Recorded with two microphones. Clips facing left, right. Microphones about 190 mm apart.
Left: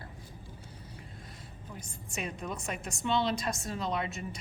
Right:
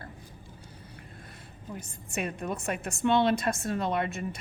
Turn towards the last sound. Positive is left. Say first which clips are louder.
# right 4 dB
turn(degrees=-55)  # may be behind; listen again after turning